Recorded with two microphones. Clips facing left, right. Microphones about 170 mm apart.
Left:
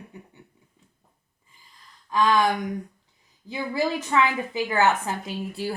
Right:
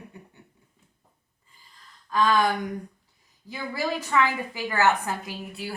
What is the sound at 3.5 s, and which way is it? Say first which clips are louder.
A woman's voice: left 4 dB; 20° left (ahead or behind).